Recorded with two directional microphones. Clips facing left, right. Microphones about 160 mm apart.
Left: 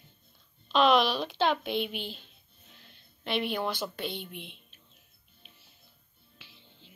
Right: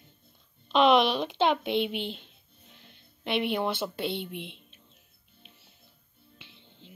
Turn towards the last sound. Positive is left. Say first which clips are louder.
# right 3 dB
turn(degrees=-20)  # may be behind; listen again after turning